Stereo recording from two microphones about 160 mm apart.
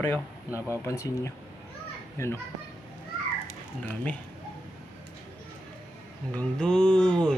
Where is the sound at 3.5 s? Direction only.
10° left (ahead or behind).